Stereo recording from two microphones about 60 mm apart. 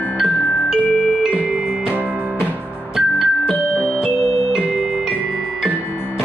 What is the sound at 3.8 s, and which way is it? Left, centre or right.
Music, centre.